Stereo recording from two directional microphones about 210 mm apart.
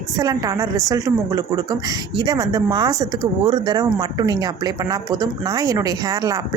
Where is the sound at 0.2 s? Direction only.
15° right (ahead or behind).